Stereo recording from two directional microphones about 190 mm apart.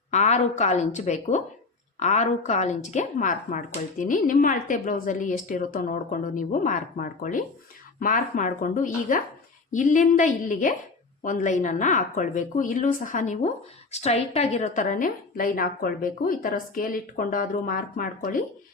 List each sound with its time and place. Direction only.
0.1 s a woman's voice: 35° left (ahead or behind)